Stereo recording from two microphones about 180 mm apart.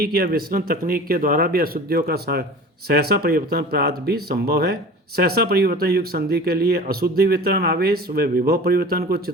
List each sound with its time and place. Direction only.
0.0 s speech: 60° right (ahead or behind)